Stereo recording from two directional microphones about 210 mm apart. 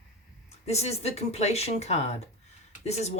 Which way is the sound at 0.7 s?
30° left (ahead or behind).